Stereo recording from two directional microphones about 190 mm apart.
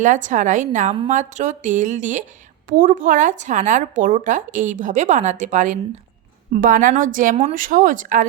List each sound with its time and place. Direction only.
0.0 s a woman's voice: 40° right (ahead or behind)